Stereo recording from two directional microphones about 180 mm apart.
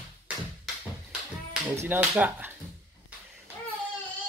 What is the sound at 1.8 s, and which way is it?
Speech, 10° right (ahead or behind).